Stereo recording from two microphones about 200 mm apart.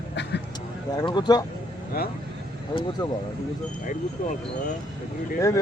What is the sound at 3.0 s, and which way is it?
Speech, 20° left (ahead or behind).